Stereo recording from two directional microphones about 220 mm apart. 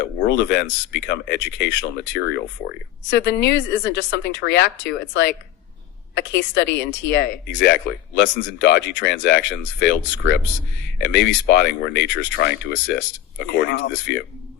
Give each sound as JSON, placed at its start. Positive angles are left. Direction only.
{"t": 0.0, "sound": "speech", "side_deg": 50}